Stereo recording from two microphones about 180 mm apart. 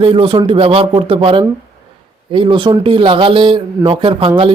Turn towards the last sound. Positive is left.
turn(degrees=-30)  # may be behind; listen again after turning